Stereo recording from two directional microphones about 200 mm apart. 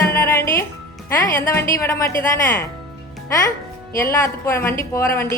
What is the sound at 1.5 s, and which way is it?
Speech, 10° left (ahead or behind).